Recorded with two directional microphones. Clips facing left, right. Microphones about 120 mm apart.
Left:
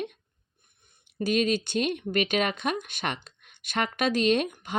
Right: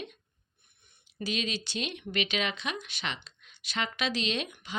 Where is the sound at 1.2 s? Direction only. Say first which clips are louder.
Left 9 dB; 50° left (ahead or behind).